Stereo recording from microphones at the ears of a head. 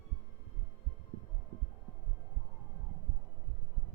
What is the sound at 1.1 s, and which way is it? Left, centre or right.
Music, right.